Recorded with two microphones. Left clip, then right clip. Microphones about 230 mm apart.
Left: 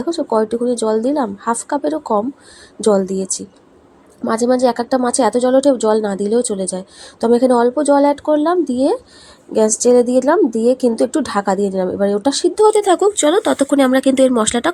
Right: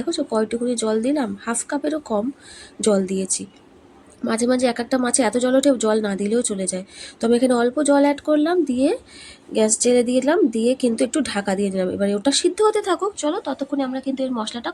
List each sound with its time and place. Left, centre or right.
0.0 s speech: centre
12.8 s speech: centre
13.1 s speech: left